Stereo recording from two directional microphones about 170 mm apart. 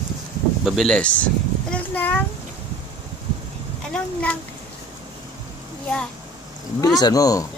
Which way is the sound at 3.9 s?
10° left (ahead or behind).